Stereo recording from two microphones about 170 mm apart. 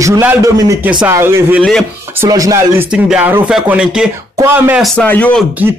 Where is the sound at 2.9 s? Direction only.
5° right (ahead or behind).